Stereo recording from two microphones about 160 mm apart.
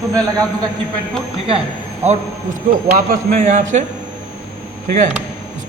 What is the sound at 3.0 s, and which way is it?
Speech, 55° right (ahead or behind).